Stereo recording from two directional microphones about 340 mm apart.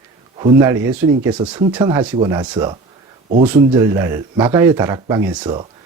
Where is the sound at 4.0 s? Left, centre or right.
Centre.